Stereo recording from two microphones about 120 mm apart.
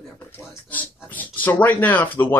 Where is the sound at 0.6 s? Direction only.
15° left (ahead or behind).